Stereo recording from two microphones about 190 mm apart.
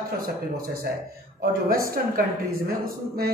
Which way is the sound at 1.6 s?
50° right (ahead or behind).